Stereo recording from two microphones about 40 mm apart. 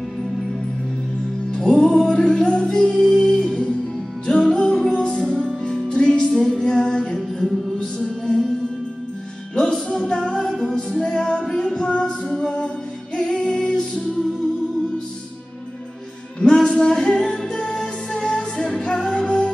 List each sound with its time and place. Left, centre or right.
1.6 s music: centre
4.9 s music: left
6.5 s female singing: centre
7.2 s music: centre
9.6 s music: centre
16.3 s music: centre